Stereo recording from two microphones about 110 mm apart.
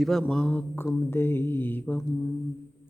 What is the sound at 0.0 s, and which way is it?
Speech, 5° left (ahead or behind).